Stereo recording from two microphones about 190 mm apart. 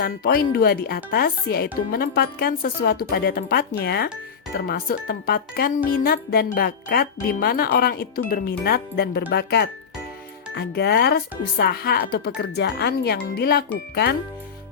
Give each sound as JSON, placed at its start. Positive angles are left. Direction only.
{"t": 0.0, "sound": "speech", "side_deg": 50}